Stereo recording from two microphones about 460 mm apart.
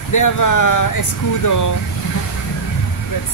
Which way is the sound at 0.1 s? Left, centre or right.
Left.